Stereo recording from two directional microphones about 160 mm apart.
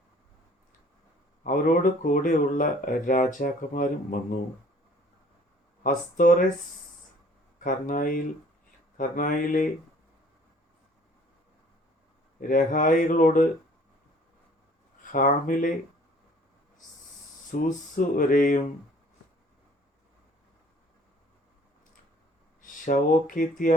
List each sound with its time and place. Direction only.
1.5 s speech: 55° left (ahead or behind)
5.8 s speech: 60° left (ahead or behind)
7.6 s speech: 60° left (ahead or behind)
12.4 s speech: 60° left (ahead or behind)
15.1 s speech: 60° left (ahead or behind)
17.5 s speech: 55° left (ahead or behind)
22.6 s speech: 55° left (ahead or behind)